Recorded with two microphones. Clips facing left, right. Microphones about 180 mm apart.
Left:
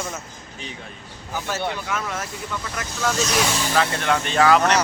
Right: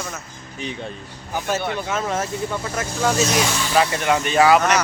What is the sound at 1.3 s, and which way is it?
Speech, 20° right (ahead or behind).